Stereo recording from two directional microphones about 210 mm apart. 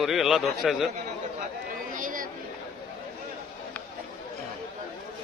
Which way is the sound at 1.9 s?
40° right (ahead or behind).